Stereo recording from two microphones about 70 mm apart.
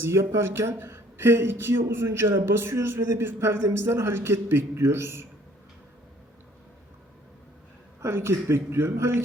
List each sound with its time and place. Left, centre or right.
0.0 s speech: right
8.0 s speech: right